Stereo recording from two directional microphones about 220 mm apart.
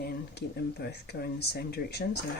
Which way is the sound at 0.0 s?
45° left (ahead or behind).